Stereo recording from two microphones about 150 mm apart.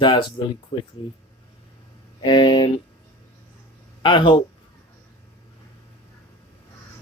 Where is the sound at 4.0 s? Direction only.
35° left (ahead or behind).